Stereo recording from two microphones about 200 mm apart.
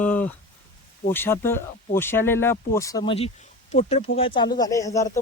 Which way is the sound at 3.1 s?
30° left (ahead or behind).